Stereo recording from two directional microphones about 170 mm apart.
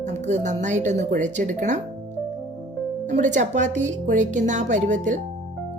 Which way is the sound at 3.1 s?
45° right (ahead or behind).